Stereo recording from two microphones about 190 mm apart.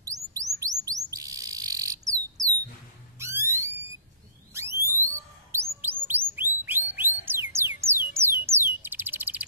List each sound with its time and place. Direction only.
0.0 s chirp: 20° right (ahead or behind)
0.6 s bird: 20° right (ahead or behind)
3.2 s a sound: 15° right (ahead or behind)
4.6 s alarm: 15° right (ahead or behind)
5.0 s bird: 15° right (ahead or behind)
6.3 s music: 10° right (ahead or behind)
8.1 s bird: 15° right (ahead or behind)